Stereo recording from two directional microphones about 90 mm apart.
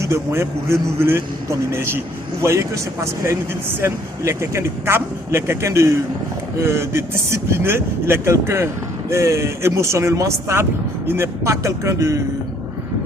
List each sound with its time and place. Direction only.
0.0 s speech: 30° right (ahead or behind)